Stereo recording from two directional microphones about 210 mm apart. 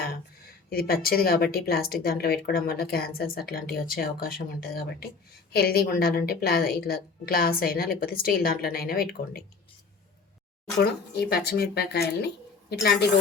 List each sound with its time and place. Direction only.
0.7 s a woman's voice: 45° left (ahead or behind)
10.8 s a woman's voice: 50° left (ahead or behind)